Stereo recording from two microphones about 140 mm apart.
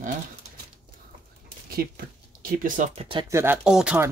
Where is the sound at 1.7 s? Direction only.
90° right.